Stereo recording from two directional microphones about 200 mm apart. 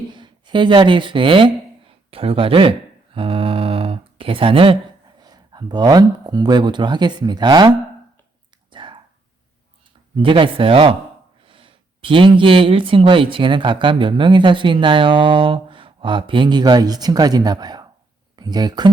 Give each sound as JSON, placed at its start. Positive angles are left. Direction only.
{"t": 0.1, "sound": "speech", "side_deg": -25}
{"t": 8.7, "sound": "a sound", "side_deg": -25}
{"t": 10.2, "sound": "speech", "side_deg": -25}